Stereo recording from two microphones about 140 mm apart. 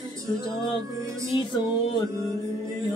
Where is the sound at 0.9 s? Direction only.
25° right (ahead or behind).